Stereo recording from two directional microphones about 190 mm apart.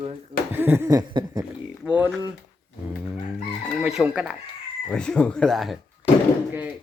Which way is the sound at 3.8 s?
5° right (ahead or behind).